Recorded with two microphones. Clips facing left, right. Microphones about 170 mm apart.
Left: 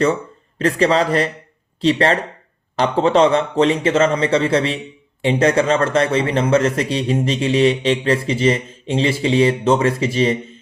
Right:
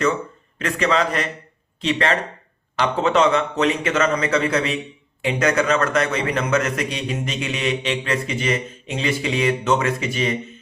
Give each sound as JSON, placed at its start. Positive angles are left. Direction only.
{"t": 0.6, "sound": "a man's voice", "side_deg": 35}